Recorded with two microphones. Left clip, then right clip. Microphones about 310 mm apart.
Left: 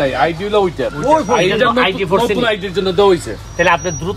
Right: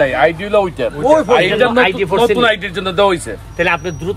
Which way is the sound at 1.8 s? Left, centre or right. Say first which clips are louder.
Right 2 dB; centre.